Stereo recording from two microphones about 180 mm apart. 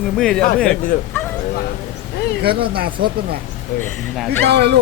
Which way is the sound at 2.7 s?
55° right (ahead or behind).